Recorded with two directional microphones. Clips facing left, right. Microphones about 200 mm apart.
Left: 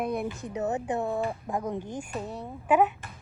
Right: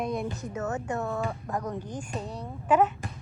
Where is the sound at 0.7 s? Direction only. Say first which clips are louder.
Left 2 dB; 15° left (ahead or behind).